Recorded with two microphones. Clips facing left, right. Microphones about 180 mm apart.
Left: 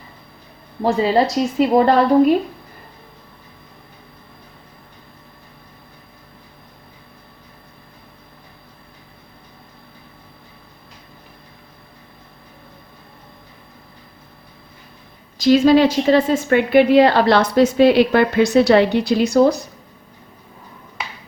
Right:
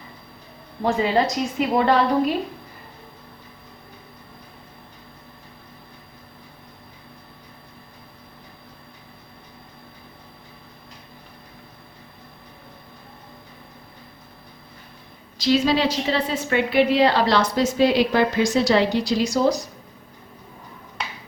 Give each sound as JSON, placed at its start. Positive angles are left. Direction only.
{"t": 0.9, "sound": "a woman's voice", "side_deg": 35}
{"t": 15.4, "sound": "a woman's voice", "side_deg": 50}